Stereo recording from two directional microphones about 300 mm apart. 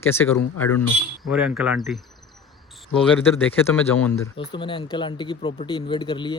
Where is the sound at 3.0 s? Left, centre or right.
Centre.